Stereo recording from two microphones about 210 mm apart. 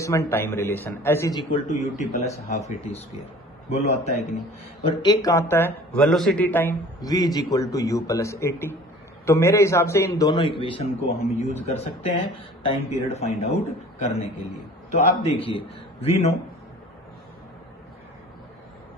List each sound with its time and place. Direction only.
0.0 s a man's voice: 15° left (ahead or behind)
1.5 s speech: 35° left (ahead or behind)
4.8 s a man's voice: 20° left (ahead or behind)
12.6 s a man's voice: 30° left (ahead or behind)